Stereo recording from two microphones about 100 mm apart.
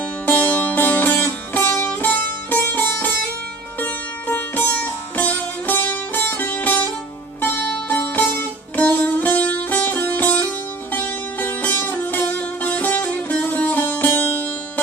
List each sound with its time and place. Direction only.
0.3 s music: 15° left (ahead or behind)
3.8 s sitar: 20° left (ahead or behind)
7.4 s music: 20° left (ahead or behind)